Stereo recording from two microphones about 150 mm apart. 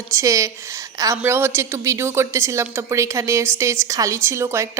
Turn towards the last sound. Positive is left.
turn(degrees=-20)  # may be behind; listen again after turning